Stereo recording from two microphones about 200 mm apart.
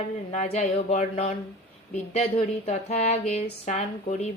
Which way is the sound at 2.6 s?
30° left (ahead or behind).